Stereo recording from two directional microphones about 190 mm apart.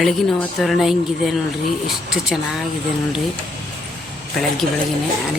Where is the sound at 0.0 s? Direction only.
Centre (ahead or behind).